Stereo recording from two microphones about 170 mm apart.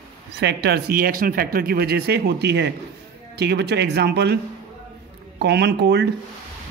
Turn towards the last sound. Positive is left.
turn(degrees=-85)